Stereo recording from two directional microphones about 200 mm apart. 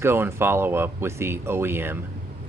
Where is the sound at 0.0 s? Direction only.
10° right (ahead or behind).